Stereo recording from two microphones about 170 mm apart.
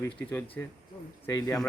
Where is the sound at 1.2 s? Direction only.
20° left (ahead or behind).